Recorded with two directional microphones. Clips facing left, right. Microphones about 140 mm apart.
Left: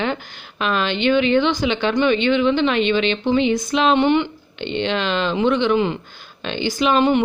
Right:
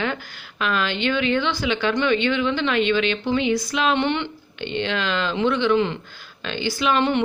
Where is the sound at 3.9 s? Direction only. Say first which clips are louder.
Left 6 dB; 10° left (ahead or behind).